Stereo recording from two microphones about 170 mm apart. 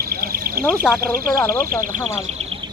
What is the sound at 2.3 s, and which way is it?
Bird, 35° right (ahead or behind).